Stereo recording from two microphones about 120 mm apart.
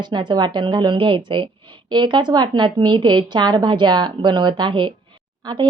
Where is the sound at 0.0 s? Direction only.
40° right (ahead or behind).